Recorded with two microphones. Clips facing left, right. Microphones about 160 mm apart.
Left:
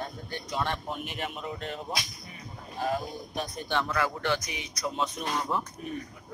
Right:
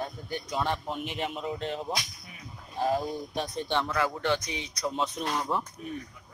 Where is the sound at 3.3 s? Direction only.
20° right (ahead or behind).